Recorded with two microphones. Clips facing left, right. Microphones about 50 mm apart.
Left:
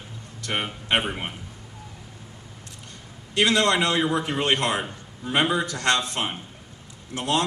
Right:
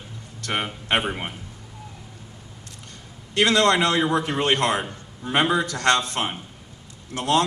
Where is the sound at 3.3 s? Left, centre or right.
Right.